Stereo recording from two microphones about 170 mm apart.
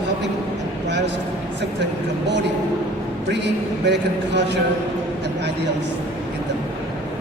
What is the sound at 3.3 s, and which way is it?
A man's voice, 90° right.